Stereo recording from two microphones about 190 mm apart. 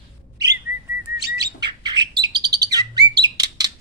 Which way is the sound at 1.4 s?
20° right (ahead or behind).